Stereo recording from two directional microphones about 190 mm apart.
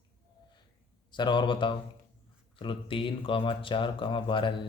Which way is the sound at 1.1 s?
25° left (ahead or behind).